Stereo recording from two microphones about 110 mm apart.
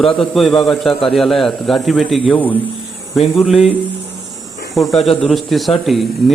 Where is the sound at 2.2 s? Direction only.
15° left (ahead or behind).